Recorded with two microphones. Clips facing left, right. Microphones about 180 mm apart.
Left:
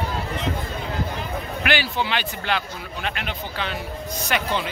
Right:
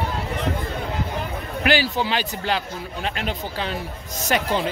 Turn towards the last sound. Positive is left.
turn(degrees=-40)  # may be behind; listen again after turning